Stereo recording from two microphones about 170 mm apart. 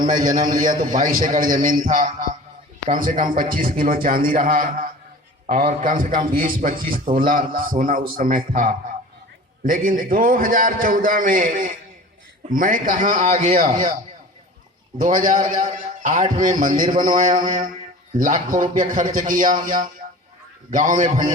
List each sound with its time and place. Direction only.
0.0 s a man's voice: 55° right (ahead or behind)
14.9 s a man's voice: 55° right (ahead or behind)